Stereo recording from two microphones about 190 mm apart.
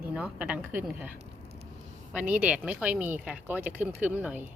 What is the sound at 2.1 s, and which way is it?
Speech, 5° right (ahead or behind).